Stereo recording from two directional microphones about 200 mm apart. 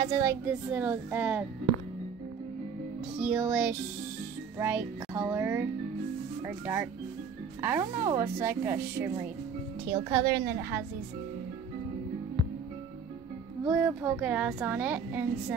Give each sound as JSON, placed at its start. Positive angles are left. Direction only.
{"t": 0.0, "sound": "a woman's voice", "side_deg": -15}
{"t": 3.2, "sound": "a woman's voice", "side_deg": -5}
{"t": 13.7, "sound": "a woman's voice", "side_deg": -5}